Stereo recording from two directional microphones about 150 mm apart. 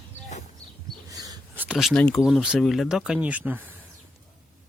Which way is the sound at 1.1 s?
25° right (ahead or behind).